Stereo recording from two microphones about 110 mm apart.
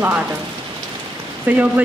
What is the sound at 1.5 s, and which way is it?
Speech, 15° right (ahead or behind).